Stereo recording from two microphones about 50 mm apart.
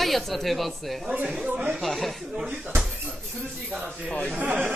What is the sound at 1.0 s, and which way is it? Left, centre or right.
Speech, right.